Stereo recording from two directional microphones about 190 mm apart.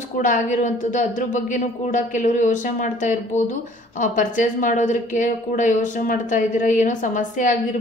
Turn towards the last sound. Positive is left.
turn(degrees=45)  # may be behind; listen again after turning